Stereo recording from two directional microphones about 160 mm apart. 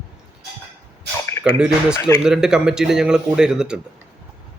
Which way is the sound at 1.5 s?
5° right (ahead or behind).